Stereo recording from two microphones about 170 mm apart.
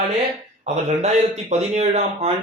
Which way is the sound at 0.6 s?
40° right (ahead or behind).